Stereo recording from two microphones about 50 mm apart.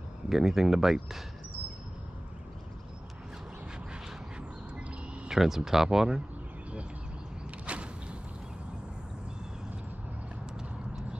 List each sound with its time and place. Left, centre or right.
0.3 s speech: centre
5.3 s speech: centre
7.6 s a sound: right